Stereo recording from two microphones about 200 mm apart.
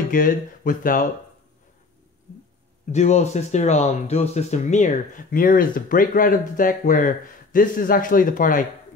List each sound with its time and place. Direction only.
0.1 s speech: 45° left (ahead or behind)
2.9 s speech: 35° left (ahead or behind)